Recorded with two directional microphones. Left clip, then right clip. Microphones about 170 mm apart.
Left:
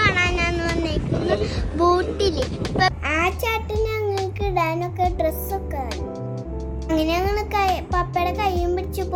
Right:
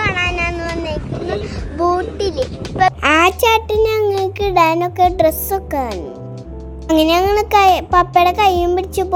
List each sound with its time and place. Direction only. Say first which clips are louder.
0.0 s child singing: right 2 dB; centre (ahead or behind)
3.0 s a sound: right 10 dB; 70° right (ahead or behind)
4.4 s music: right 12 dB; 65° right (ahead or behind)
6.8 s a child's voice: right 9 dB; 60° right (ahead or behind)